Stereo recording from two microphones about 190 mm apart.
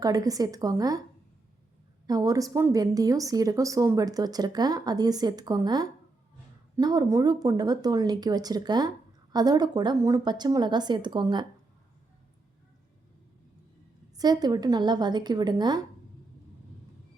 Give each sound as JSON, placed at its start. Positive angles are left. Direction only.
{"t": 0.0, "sound": "a woman's voice", "side_deg": -20}
{"t": 2.0, "sound": "a woman's voice", "side_deg": -20}
{"t": 14.2, "sound": "a woman's voice", "side_deg": -20}